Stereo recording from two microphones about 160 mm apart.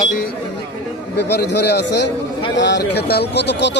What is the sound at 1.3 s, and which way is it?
Speech, 90° left.